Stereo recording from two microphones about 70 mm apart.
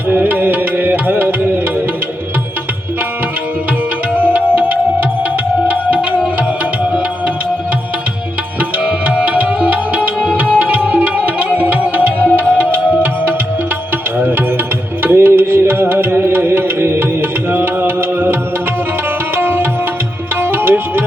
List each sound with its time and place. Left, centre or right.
0.1 s music: right
4.1 s music: right
8.8 s music: centre
15.0 s music: right
19.4 s tabla: right
20.3 s music: right